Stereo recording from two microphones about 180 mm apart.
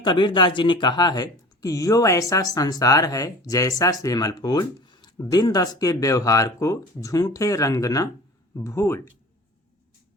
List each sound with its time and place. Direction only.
0.0 s speech: 25° left (ahead or behind)